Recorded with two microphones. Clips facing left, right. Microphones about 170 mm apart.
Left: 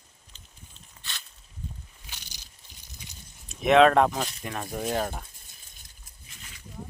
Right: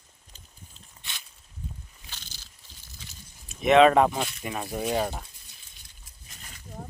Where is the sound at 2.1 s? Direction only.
15° left (ahead or behind).